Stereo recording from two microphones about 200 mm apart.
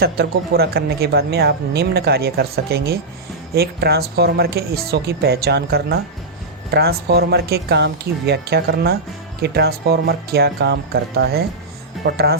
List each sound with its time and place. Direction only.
0.0 s speech: 50° right (ahead or behind)